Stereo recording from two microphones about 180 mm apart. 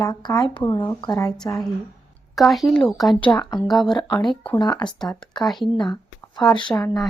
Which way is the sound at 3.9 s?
25° left (ahead or behind).